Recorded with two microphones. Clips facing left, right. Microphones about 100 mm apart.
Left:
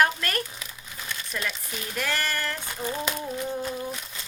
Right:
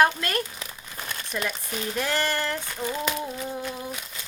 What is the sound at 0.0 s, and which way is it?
Speech, 25° right (ahead or behind).